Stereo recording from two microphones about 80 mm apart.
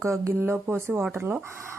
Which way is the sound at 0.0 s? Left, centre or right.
Right.